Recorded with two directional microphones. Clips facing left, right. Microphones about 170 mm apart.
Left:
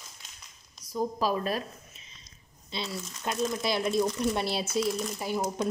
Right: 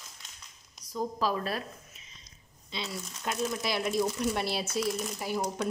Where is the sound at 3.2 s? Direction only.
25° left (ahead or behind).